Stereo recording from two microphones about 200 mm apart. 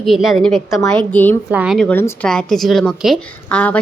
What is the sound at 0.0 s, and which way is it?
Speech, centre (ahead or behind).